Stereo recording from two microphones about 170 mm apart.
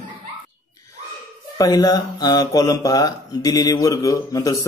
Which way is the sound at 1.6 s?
20° left (ahead or behind).